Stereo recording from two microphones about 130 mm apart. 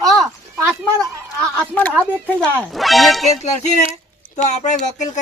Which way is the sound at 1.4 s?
10° left (ahead or behind).